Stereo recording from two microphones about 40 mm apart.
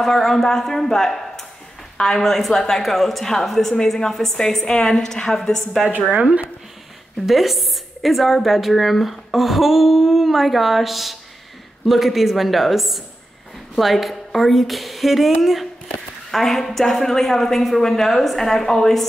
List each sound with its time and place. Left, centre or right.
0.0 s a woman's voice: centre
5.9 s a woman's voice: right
7.2 s a woman's voice: centre